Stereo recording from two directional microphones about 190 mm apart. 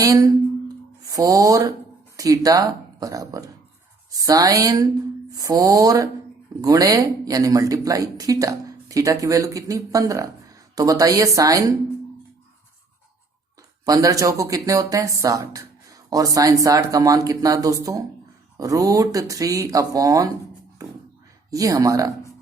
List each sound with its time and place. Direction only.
0.0 s a woman's voice: 20° right (ahead or behind)
13.8 s speech: 20° right (ahead or behind)
20.8 s a sound: 20° right (ahead or behind)
21.5 s speech: 20° right (ahead or behind)